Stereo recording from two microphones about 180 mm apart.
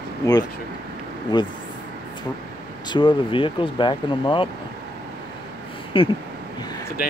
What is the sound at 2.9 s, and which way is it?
Speech, 30° left (ahead or behind).